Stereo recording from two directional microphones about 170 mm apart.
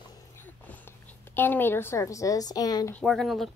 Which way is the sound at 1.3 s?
10° left (ahead or behind).